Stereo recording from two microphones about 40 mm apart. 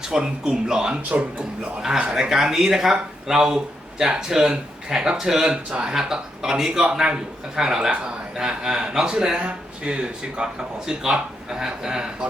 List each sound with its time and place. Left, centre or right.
0.0 s speech: centre
5.5 s speech: right
5.9 s speech: centre
9.4 s speech: right